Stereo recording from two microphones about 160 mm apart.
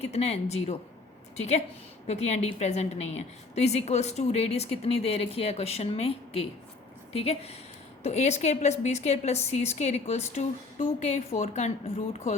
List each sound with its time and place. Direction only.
0.0 s a woman's voice: 40° left (ahead or behind)